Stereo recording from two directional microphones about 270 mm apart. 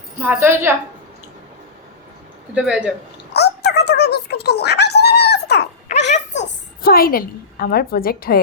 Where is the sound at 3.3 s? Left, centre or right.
Left.